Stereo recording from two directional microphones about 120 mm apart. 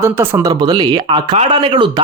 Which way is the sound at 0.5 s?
35° right (ahead or behind).